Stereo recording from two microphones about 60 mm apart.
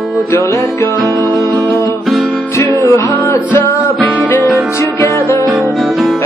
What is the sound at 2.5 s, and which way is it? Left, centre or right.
Music, left.